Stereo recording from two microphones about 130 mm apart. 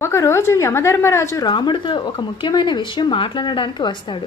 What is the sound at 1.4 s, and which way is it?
Speech, 35° left (ahead or behind).